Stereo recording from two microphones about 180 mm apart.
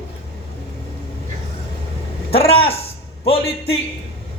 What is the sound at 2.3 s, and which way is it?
Speech, 30° left (ahead or behind).